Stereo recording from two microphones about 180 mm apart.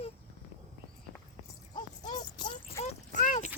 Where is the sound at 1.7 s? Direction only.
25° left (ahead or behind).